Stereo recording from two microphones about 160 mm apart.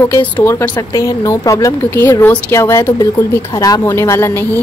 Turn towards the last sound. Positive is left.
turn(degrees=15)  # may be behind; listen again after turning